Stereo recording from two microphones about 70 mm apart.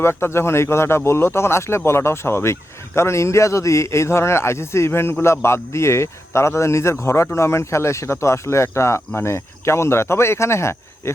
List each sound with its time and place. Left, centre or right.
0.0 s speech: left